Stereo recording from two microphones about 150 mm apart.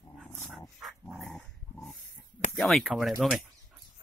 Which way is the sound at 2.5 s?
Centre (ahead or behind).